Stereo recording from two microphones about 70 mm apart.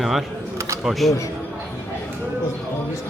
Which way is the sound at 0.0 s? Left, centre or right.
Centre.